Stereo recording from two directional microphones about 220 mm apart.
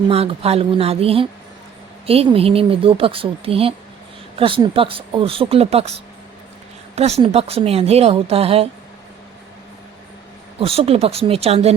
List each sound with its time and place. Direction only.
0.1 s speech: 25° right (ahead or behind)
7.2 s speech: 25° right (ahead or behind)
10.6 s speech: 25° right (ahead or behind)